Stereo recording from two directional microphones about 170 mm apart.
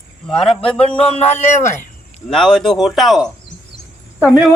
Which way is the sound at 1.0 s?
40° left (ahead or behind).